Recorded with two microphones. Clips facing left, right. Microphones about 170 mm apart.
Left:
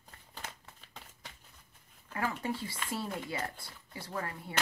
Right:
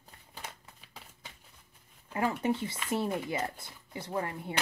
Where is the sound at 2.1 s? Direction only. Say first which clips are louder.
Right 5 dB; 25° right (ahead or behind).